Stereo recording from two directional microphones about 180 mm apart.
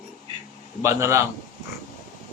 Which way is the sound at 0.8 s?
15° right (ahead or behind).